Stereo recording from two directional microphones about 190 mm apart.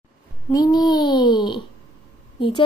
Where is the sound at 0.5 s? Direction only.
20° left (ahead or behind).